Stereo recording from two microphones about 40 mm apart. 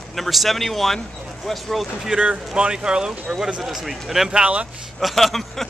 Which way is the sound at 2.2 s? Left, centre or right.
Right.